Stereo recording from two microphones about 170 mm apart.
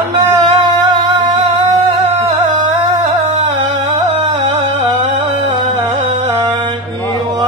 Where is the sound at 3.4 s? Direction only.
35° right (ahead or behind).